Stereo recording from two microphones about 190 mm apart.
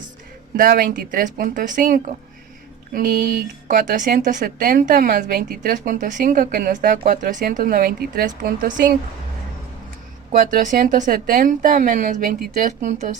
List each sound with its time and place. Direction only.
0.5 s a woman's voice: 45° right (ahead or behind)
3.7 s a woman's voice: 45° right (ahead or behind)
10.3 s a woman's voice: 45° right (ahead or behind)